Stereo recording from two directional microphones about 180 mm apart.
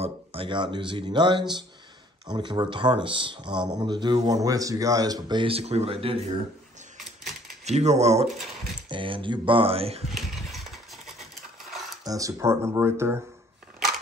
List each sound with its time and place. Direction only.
0.0 s speech: 30° right (ahead or behind)
7.6 s speech: 40° right (ahead or behind)
10.1 s engine: centre (ahead or behind)
12.0 s speech: 20° right (ahead or behind)